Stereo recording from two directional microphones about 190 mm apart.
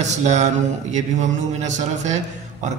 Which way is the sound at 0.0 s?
40° right (ahead or behind).